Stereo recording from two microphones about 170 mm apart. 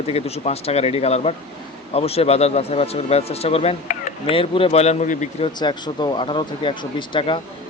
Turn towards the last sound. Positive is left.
turn(degrees=30)  # may be behind; listen again after turning